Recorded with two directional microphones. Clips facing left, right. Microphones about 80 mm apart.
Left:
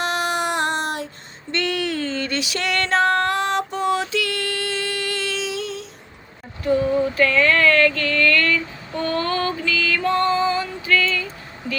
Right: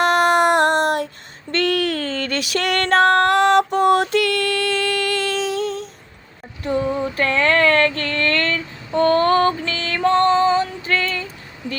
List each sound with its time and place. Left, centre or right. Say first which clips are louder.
0.0 s child singing: right 8 dB; right
1.5 s music: right 4 dB; right
7.2 s a sound: right 2 dB; right
10.6 s female singing: even; right